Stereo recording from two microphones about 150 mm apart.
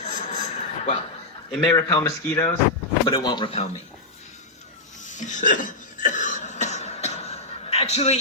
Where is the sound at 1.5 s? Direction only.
30° left (ahead or behind).